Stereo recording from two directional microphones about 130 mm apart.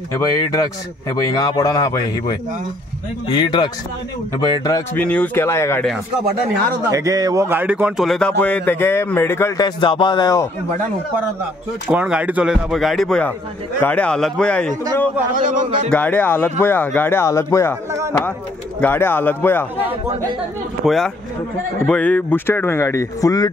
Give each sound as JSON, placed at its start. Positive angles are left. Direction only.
{"t": 0.1, "sound": "speech", "side_deg": 30}
{"t": 4.9, "sound": "speech", "side_deg": 10}
{"t": 6.9, "sound": "speech", "side_deg": -25}
{"t": 8.0, "sound": "speech", "side_deg": 5}
{"t": 9.6, "sound": "speech", "side_deg": 40}
{"t": 11.9, "sound": "speech", "side_deg": -10}
{"t": 15.3, "sound": "a man's voice", "side_deg": -80}
{"t": 15.9, "sound": "speech", "side_deg": 10}
{"t": 18.8, "sound": "speech", "side_deg": 15}
{"t": 20.8, "sound": "speech", "side_deg": 0}
{"t": 21.8, "sound": "speech", "side_deg": 10}